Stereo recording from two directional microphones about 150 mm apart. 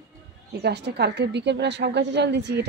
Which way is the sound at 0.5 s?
90° right.